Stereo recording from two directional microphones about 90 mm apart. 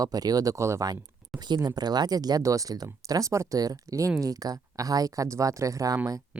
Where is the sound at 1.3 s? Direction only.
50° right (ahead or behind).